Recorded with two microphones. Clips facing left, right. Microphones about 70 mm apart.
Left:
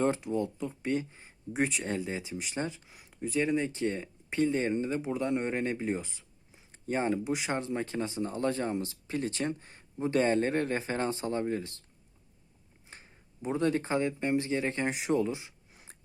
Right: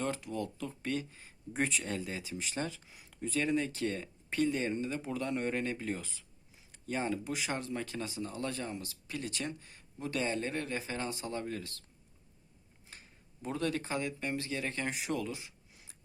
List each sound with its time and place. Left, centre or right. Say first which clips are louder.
0.0 s speech: left 7 dB; left
1.5 s speech: left 3 dB; centre
1.8 s speech: left 4 dB; left
6.7 s a sound: left 5 dB; left
7.3 s speech: left 5 dB; left
12.9 s speech: left 3 dB; left